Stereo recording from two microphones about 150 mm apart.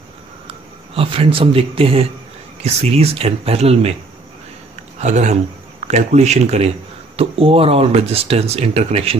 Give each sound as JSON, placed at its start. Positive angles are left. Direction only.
{"t": 0.5, "sound": "speech", "side_deg": -35}
{"t": 4.9, "sound": "speech", "side_deg": -50}